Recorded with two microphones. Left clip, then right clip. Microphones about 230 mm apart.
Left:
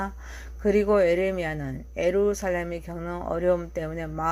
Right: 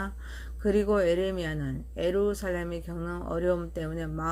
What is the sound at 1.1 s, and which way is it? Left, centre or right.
Speech, left.